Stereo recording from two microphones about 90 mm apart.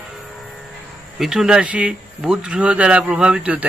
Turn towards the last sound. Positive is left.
turn(degrees=-15)  # may be behind; listen again after turning